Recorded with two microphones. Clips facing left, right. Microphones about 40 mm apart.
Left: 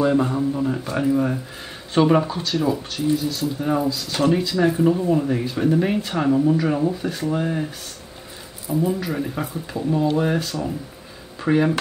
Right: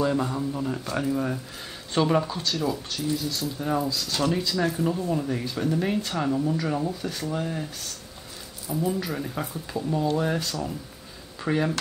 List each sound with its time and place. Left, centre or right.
0.0 s speech: left
8.6 s speech: left